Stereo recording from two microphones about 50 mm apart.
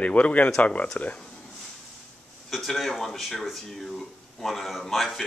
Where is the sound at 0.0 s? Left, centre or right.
Left.